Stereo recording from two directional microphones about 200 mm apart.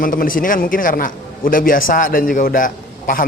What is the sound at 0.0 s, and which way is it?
A man's voice, 45° left (ahead or behind).